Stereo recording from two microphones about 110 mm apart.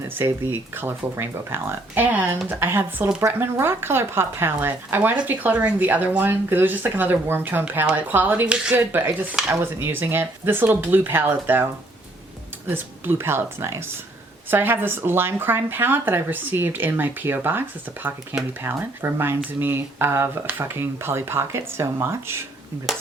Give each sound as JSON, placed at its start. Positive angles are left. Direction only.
{"t": 0.1, "sound": "speech", "side_deg": -20}
{"t": 18.6, "sound": "speech", "side_deg": -25}